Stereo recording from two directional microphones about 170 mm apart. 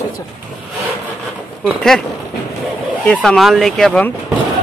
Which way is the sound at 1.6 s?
Centre (ahead or behind).